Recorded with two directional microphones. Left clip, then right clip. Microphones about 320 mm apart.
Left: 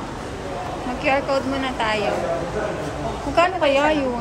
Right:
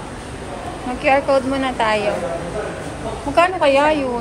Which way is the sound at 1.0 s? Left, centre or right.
Centre.